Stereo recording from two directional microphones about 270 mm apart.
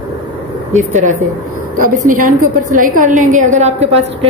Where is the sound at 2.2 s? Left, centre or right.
Right.